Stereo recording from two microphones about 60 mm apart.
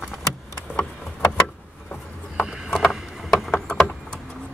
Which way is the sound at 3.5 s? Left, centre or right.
Centre.